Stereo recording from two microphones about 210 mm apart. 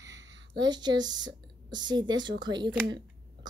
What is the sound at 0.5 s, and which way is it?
Speech, 20° right (ahead or behind).